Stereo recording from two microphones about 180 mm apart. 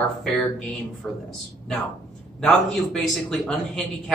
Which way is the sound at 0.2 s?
5° left (ahead or behind).